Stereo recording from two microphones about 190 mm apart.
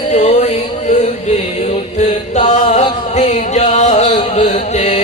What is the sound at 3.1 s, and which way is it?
Music, 40° left (ahead or behind).